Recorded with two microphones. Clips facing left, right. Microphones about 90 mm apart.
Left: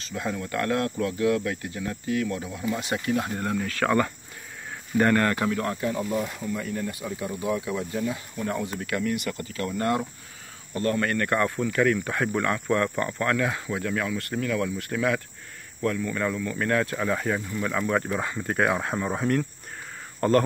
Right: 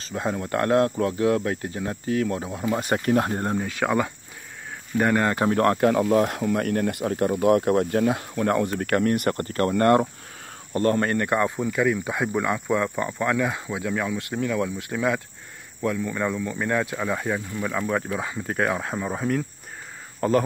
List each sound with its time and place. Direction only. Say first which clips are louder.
0.0 s speech: right 3 dB; 35° right (ahead or behind)
3.6 s speech: left 3 dB; 15° right (ahead or behind)
5.1 s speech: right 1 dB; 20° right (ahead or behind)
5.6 s speech: right 8 dB; 65° right (ahead or behind)
10.7 s speech: right 4 dB; 35° right (ahead or behind); by 20.4 s centre (ahead or behind)